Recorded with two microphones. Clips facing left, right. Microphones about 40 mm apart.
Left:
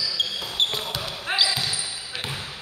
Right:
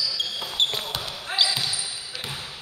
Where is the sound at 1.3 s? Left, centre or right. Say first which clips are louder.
Left 1 dB; left.